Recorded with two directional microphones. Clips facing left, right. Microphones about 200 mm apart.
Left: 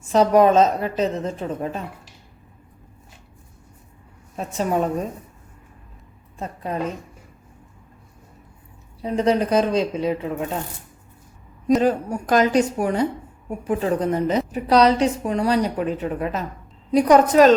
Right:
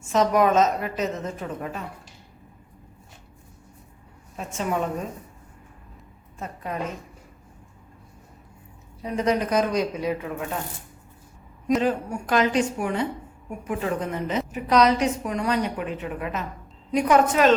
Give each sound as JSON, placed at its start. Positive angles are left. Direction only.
{"t": 0.0, "sound": "a woman's voice", "side_deg": 35}
{"t": 4.4, "sound": "a woman's voice", "side_deg": 35}
{"t": 6.4, "sound": "a woman's voice", "side_deg": 30}
{"t": 9.0, "sound": "a woman's voice", "side_deg": 30}
{"t": 11.7, "sound": "a woman's voice", "side_deg": 40}